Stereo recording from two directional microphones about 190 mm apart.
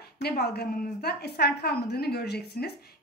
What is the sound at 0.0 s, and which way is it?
A woman's voice, 55° left (ahead or behind).